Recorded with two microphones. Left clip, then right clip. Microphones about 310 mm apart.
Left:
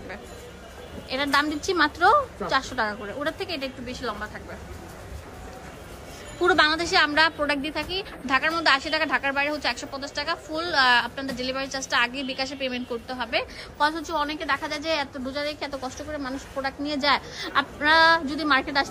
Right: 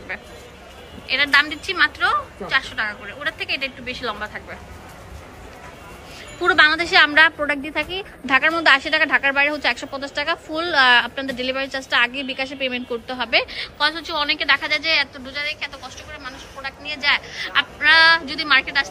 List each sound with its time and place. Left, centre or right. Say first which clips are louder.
1.0 s a woman's voice: right 7 dB; centre
6.4 s a woman's voice: right 5 dB; centre